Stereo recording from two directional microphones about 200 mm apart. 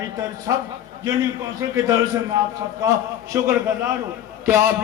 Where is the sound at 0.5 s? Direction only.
15° right (ahead or behind).